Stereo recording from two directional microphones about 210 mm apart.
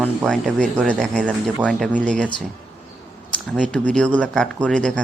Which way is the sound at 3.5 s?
5° left (ahead or behind).